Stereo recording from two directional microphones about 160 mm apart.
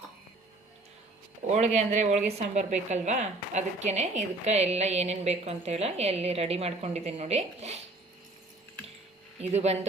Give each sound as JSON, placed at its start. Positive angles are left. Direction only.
{"t": 1.5, "sound": "a woman's voice", "side_deg": -45}
{"t": 9.4, "sound": "a woman's voice", "side_deg": -40}